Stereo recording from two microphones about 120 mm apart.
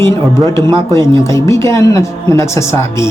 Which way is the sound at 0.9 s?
25° left (ahead or behind).